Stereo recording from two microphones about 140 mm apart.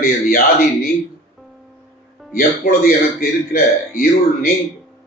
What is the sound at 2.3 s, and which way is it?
A man's voice, 90° left.